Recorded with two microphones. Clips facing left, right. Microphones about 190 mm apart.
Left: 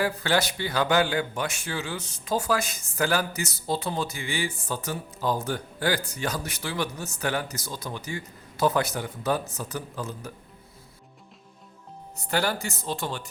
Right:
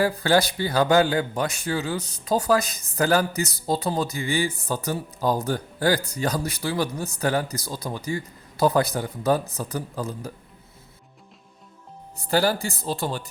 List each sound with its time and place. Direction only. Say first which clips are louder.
0.0 s a man's voice: right 5 dB; 35° right (ahead or behind)
12.1 s a man's voice: right 5 dB; 35° right (ahead or behind)